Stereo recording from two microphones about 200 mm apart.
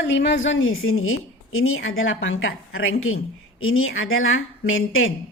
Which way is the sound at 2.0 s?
75° left (ahead or behind).